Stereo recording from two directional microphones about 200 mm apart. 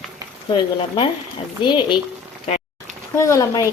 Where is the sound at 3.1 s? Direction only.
15° left (ahead or behind).